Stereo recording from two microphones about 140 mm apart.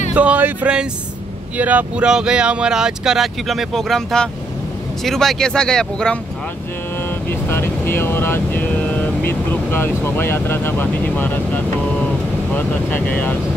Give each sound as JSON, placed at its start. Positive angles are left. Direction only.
{"t": 0.1, "sound": "a sound", "side_deg": -10}
{"t": 1.6, "sound": "speech", "side_deg": -10}
{"t": 7.2, "sound": "speech", "side_deg": 15}